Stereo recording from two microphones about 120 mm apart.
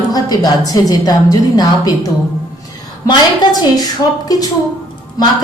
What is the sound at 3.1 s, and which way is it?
A woman's voice, 35° left (ahead or behind).